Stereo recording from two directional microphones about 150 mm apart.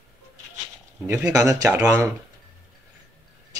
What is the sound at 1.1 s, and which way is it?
Speech, 15° right (ahead or behind).